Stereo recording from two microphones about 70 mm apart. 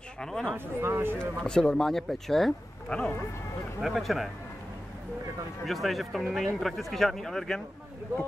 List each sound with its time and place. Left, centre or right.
0.2 s speech: centre
0.7 s speech: right
1.4 s speech: centre
2.9 s speech: centre
3.8 s speech: centre
5.7 s speech: centre